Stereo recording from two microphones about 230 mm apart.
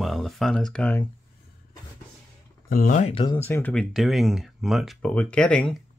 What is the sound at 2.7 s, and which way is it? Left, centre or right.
Speech, left.